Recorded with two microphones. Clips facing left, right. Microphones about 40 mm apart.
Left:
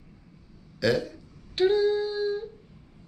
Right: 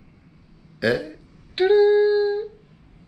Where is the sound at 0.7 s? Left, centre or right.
Centre.